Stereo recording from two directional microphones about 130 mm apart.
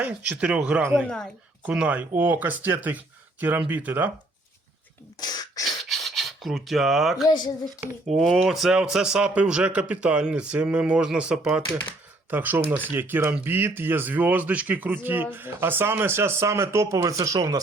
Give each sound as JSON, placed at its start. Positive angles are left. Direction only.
{"t": 0.0, "sound": "speech", "side_deg": -10}
{"t": 1.0, "sound": "speech", "side_deg": 5}
{"t": 1.6, "sound": "speech", "side_deg": -10}
{"t": 5.2, "sound": "throat clearing", "side_deg": 30}
{"t": 5.6, "sound": "filing", "side_deg": 0}
{"t": 7.3, "sound": "speech", "side_deg": 30}
{"t": 8.1, "sound": "speech", "side_deg": 0}